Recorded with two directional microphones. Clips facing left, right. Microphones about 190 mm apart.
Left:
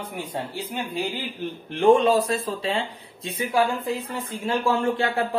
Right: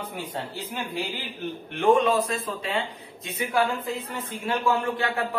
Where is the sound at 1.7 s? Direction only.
30° left (ahead or behind).